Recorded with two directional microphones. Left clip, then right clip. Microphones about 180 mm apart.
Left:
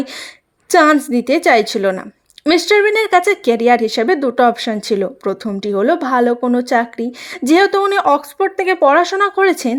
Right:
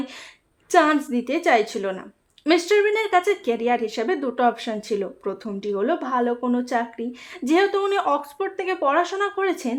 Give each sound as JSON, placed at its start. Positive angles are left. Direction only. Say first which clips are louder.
{"t": 0.7, "sound": "a woman's voice", "louder": "left 7 dB", "side_deg": 40}